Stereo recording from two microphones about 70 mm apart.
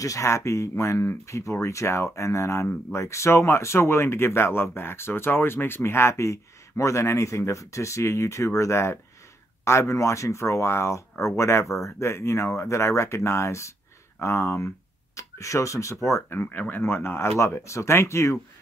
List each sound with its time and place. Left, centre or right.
0.0 s speech: left